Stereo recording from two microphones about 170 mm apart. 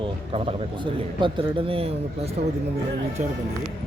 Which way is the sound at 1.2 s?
30° right (ahead or behind).